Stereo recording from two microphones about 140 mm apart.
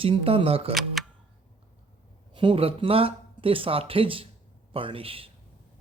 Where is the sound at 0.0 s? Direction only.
40° right (ahead or behind).